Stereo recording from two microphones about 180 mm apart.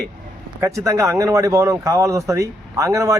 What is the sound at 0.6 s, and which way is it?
Speech, 15° right (ahead or behind).